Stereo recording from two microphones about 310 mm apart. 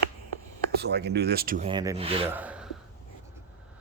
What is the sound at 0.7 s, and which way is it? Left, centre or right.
Speech, right.